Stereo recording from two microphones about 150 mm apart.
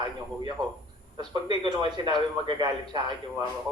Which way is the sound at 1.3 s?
30° right (ahead or behind).